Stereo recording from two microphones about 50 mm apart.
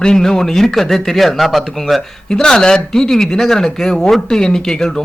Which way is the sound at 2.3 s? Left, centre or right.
Centre.